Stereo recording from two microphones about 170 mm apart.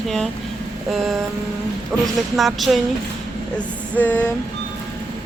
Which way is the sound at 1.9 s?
10° left (ahead or behind).